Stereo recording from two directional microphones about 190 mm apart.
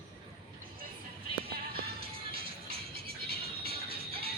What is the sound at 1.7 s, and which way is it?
Music, 55° right (ahead or behind).